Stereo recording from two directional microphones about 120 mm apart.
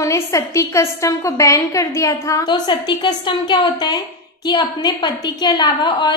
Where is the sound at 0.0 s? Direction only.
25° left (ahead or behind).